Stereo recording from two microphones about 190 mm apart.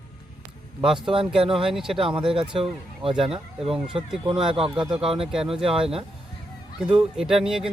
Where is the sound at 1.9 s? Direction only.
30° right (ahead or behind).